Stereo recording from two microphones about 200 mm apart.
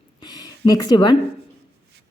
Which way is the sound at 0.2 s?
20° left (ahead or behind).